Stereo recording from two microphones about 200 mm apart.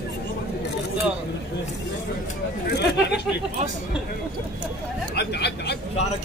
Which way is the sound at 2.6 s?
55° left (ahead or behind).